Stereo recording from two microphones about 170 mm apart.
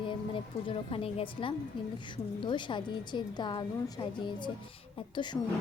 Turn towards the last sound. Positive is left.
turn(degrees=20)  # may be behind; listen again after turning